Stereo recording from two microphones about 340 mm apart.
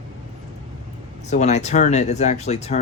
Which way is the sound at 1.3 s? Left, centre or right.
Centre.